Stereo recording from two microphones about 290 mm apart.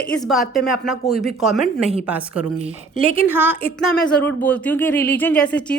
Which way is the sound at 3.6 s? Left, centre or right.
Centre.